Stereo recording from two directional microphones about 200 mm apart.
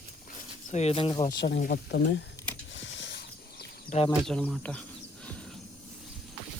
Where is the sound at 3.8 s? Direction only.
30° left (ahead or behind).